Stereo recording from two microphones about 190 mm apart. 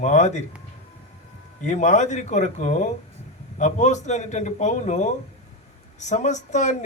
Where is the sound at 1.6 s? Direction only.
40° left (ahead or behind).